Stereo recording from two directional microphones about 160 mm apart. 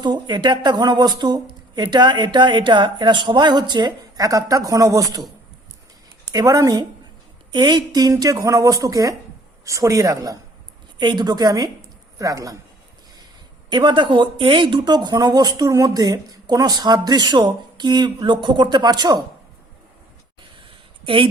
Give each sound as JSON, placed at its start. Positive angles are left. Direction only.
{"t": 0.0, "sound": "speech", "side_deg": -30}
{"t": 6.3, "sound": "speech", "side_deg": -20}
{"t": 13.7, "sound": "speech", "side_deg": -30}
{"t": 21.0, "sound": "speech", "side_deg": -35}